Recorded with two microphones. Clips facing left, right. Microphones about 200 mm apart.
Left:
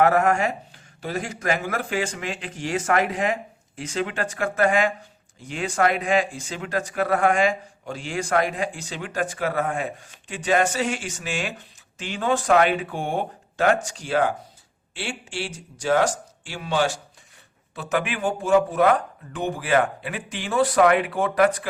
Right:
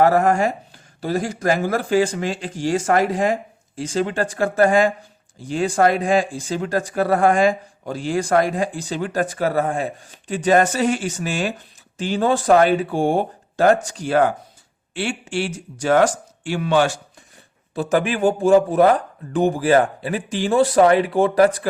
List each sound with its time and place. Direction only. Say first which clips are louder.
0.0 s speech: right 3 dB; 35° right (ahead or behind); by 16.9 s 60° right (ahead or behind)
17.7 s speech: right 7 dB; 35° right (ahead or behind)